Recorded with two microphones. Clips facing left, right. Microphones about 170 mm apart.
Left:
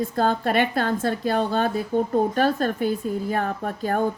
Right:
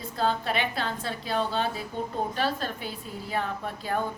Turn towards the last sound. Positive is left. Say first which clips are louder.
# left 6 dB
turn(degrees=45)  # may be behind; listen again after turning